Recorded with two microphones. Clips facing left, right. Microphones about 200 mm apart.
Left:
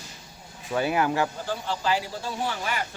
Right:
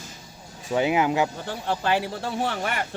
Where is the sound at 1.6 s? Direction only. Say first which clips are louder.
Right 4 dB; 60° right (ahead or behind).